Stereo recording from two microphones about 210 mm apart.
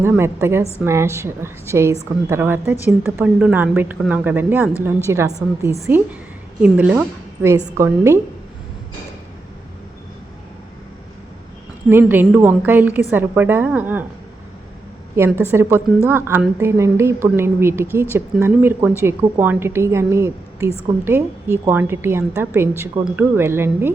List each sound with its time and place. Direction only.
0.0 s a woman's voice: 10° right (ahead or behind)
11.9 s a woman's voice: 10° right (ahead or behind)
15.4 s a woman's voice: 10° right (ahead or behind)